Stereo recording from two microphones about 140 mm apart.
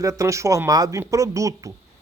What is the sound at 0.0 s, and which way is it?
Speech, 20° right (ahead or behind).